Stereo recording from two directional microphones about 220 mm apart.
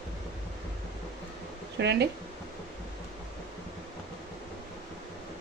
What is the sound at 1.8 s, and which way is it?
Speech, 50° right (ahead or behind).